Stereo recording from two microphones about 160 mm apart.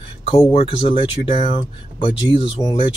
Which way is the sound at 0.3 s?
35° left (ahead or behind).